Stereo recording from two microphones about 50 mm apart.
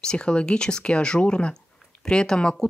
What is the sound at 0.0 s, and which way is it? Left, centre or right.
Speech, centre.